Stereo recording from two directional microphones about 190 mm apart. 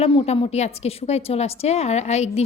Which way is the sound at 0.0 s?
30° left (ahead or behind).